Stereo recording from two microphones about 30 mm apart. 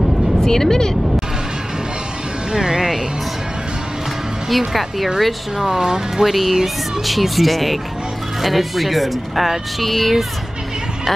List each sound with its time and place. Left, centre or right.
0.4 s speech: centre
2.5 s speech: right
4.5 s speech: centre
5.8 s speech: right
6.2 s speech: centre